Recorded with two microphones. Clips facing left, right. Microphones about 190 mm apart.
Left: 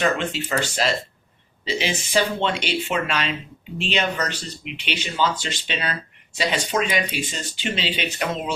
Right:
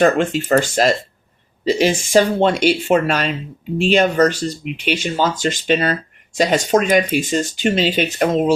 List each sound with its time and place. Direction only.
0.0 s speech: 50° right (ahead or behind)